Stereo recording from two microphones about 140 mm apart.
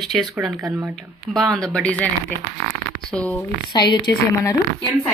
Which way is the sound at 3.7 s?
30° left (ahead or behind).